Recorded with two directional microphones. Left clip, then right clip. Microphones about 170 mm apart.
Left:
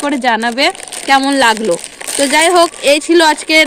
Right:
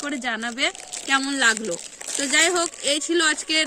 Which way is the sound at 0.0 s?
20° right (ahead or behind).